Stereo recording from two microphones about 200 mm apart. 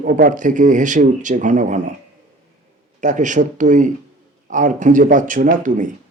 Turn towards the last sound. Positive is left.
turn(degrees=-40)  # may be behind; listen again after turning